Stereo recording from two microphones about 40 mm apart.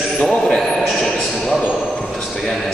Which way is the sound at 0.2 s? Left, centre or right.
Left.